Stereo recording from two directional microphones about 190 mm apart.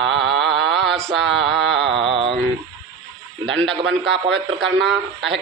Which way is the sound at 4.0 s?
65° right (ahead or behind).